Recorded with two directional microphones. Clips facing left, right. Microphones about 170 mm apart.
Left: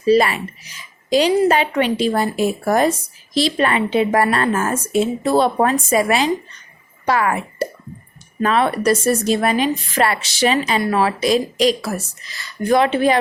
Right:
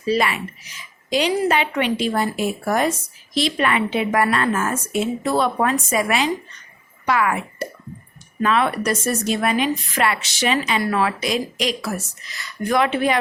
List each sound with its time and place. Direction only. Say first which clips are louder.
0.0 s a woman's voice: left 6 dB; 35° left (ahead or behind)